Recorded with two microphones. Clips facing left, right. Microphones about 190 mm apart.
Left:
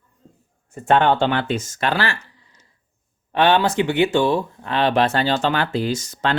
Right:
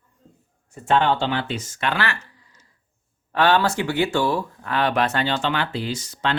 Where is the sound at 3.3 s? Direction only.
20° left (ahead or behind).